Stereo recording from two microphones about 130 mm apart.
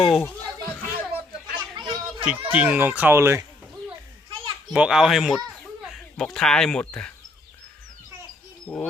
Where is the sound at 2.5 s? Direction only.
10° right (ahead or behind).